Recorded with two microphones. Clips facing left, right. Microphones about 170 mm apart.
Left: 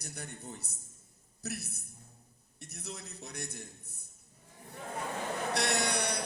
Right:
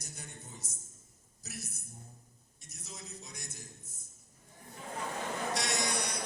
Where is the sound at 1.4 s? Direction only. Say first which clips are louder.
Left 6 dB; 65° left (ahead or behind).